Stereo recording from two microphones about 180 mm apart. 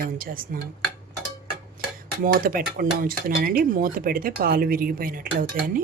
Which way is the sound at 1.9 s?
50° right (ahead or behind).